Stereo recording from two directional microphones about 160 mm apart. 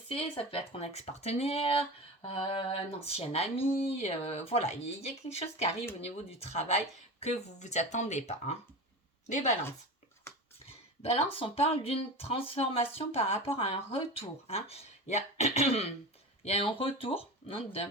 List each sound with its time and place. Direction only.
0.1 s speech: 35° left (ahead or behind)
10.7 s speech: 40° left (ahead or behind)